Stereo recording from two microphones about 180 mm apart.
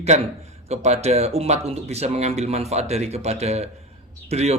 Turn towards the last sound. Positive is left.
turn(degrees=-35)  # may be behind; listen again after turning